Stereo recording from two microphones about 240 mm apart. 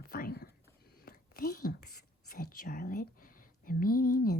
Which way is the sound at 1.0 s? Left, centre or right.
Left.